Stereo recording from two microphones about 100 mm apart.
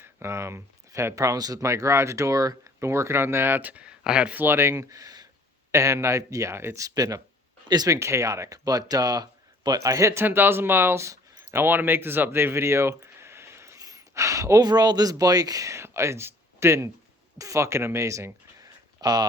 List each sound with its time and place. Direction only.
0.0 s speech: 25° right (ahead or behind)
5.7 s speech: 30° right (ahead or behind)
6.8 s speech: 40° right (ahead or behind)
7.9 s speech: 30° right (ahead or behind)
18.9 s speech: 40° right (ahead or behind)